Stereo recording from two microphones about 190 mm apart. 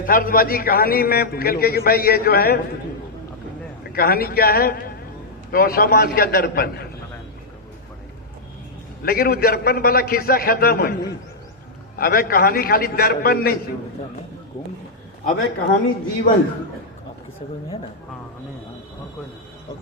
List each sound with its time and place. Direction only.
0.0 s a man's voice: 45° left (ahead or behind)
3.9 s a man's voice: 50° left (ahead or behind)
9.0 s a man's voice: 50° left (ahead or behind)
15.2 s a man's voice: 50° left (ahead or behind)